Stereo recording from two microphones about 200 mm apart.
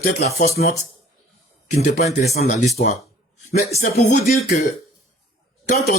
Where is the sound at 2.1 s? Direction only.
35° left (ahead or behind).